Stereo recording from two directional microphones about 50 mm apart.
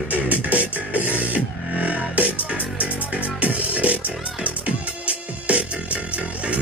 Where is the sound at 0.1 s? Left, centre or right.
Right.